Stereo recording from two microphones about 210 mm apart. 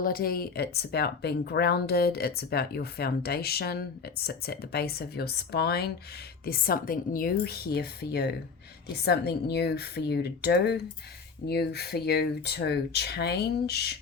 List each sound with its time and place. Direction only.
0.0 s speech: 45° left (ahead or behind)